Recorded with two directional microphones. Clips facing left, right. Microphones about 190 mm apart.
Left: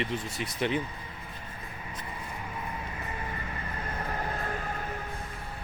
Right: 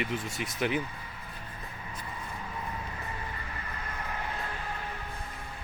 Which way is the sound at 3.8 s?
45° left (ahead or behind).